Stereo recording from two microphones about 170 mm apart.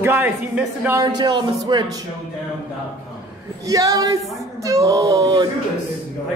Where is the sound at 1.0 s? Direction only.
25° right (ahead or behind).